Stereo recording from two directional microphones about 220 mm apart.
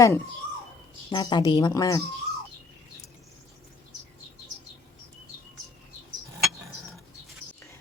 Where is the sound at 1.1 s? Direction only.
20° left (ahead or behind).